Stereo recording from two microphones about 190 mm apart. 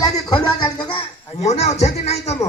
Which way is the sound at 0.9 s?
35° left (ahead or behind).